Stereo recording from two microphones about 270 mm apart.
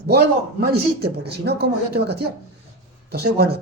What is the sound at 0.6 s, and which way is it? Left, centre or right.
Speech, right.